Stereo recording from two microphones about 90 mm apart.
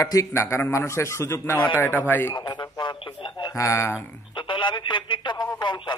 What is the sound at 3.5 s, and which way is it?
Speech, 35° left (ahead or behind).